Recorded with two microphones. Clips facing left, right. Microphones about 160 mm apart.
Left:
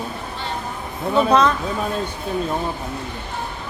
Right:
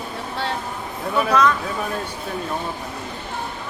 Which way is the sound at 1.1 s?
30° left (ahead or behind).